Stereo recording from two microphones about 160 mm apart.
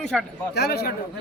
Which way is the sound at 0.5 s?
85° left.